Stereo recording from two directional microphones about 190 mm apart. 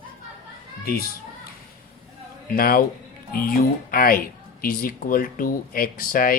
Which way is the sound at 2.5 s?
50° left (ahead or behind).